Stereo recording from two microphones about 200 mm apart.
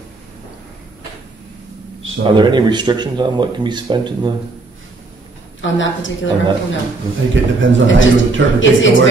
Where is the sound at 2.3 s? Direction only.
20° right (ahead or behind).